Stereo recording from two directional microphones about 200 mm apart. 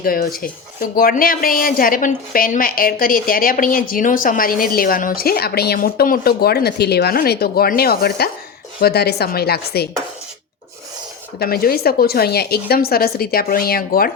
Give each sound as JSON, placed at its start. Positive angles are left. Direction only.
{"t": 0.0, "sound": "speech", "side_deg": 45}
{"t": 11.3, "sound": "speech", "side_deg": 50}